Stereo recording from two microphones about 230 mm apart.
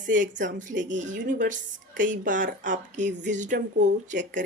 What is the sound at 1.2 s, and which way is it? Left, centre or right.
Speech, right.